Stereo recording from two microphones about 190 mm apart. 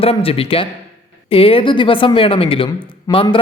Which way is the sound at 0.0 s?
30° left (ahead or behind).